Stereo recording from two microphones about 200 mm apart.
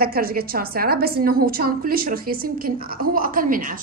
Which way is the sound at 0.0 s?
50° right (ahead or behind).